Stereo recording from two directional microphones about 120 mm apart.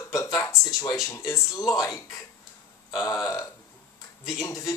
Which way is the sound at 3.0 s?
30° left (ahead or behind).